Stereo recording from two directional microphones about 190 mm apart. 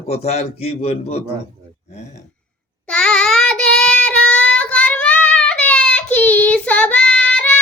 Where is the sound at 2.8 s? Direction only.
5° left (ahead or behind).